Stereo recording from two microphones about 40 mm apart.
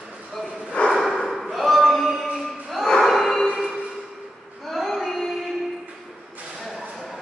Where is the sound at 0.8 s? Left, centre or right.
Left.